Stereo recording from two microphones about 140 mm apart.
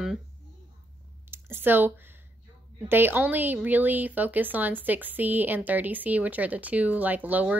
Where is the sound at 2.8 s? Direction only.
15° right (ahead or behind).